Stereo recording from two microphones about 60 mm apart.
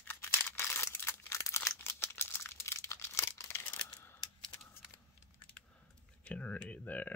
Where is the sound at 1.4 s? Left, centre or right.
Left.